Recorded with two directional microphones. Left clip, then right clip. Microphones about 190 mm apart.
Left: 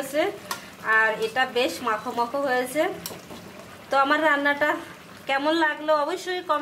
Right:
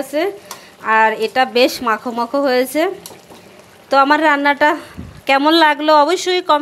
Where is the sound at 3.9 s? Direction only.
40° right (ahead or behind).